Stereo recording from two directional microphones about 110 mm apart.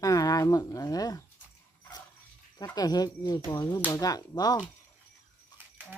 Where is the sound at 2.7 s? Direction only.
35° left (ahead or behind).